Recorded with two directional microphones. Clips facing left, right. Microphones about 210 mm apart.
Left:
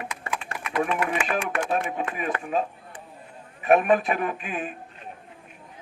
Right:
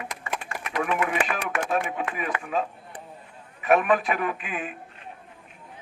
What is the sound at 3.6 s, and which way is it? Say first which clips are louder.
A man's voice: left 2 dB; 40° left (ahead or behind).